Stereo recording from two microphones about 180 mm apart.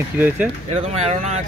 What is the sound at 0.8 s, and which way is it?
Speech, 40° right (ahead or behind).